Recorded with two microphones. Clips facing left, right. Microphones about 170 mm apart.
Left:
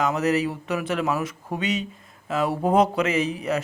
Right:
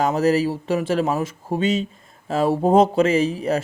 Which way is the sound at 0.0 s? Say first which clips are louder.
Right 4 dB; 30° right (ahead or behind).